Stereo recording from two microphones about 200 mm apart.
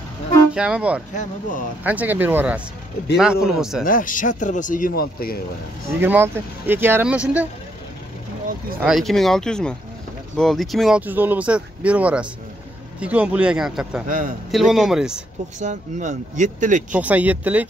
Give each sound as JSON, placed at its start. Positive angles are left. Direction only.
{"t": 0.6, "sound": "speech", "side_deg": -5}
{"t": 3.8, "sound": "speech", "side_deg": 45}
{"t": 5.9, "sound": "speech", "side_deg": -10}
{"t": 8.8, "sound": "speech", "side_deg": 0}
{"t": 14.0, "sound": "speech", "side_deg": -40}
{"t": 14.5, "sound": "speech", "side_deg": 0}
{"t": 15.6, "sound": "speech", "side_deg": -40}
{"t": 16.9, "sound": "speech", "side_deg": -5}